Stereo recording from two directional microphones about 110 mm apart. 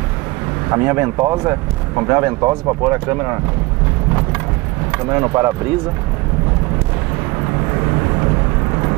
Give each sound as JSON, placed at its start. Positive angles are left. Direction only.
{"t": 0.7, "sound": "speech", "side_deg": -20}
{"t": 4.9, "sound": "speech", "side_deg": -20}
{"t": 7.8, "sound": "vehicle", "side_deg": -25}